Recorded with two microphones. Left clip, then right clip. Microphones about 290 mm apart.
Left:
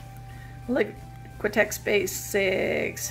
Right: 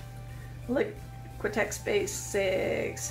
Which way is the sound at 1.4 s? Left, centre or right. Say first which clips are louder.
Left 6 dB; left.